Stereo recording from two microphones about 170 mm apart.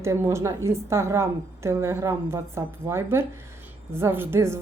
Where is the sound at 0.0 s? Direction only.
15° right (ahead or behind).